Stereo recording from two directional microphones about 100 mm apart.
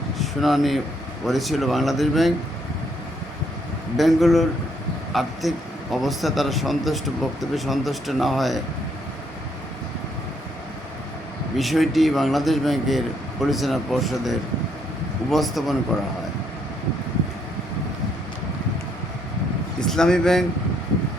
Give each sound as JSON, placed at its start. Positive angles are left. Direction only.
{"t": 0.2, "sound": "a man's voice", "side_deg": 0}
{"t": 3.9, "sound": "a man's voice", "side_deg": 0}
{"t": 11.5, "sound": "a man's voice", "side_deg": 0}
{"t": 19.9, "sound": "a man's voice", "side_deg": 5}